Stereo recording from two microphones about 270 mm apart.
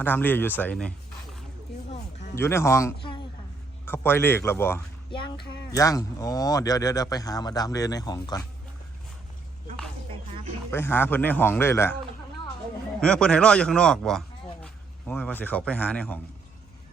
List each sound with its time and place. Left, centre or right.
0.0 s speech: centre
10.1 s dog: centre
10.7 s speech: centre
13.0 s speech: centre